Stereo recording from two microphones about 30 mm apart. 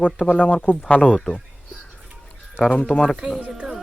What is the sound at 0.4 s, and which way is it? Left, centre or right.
Speech, left.